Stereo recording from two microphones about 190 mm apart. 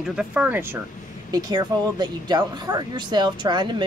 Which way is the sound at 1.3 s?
20° right (ahead or behind).